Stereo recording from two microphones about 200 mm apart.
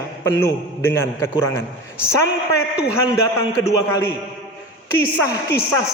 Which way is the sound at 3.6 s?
15° left (ahead or behind).